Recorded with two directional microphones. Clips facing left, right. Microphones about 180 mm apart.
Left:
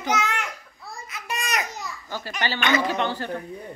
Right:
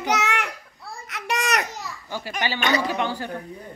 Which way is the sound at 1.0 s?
70° right (ahead or behind).